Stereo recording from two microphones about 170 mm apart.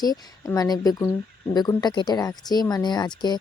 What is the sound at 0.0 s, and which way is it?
Speech, 20° left (ahead or behind).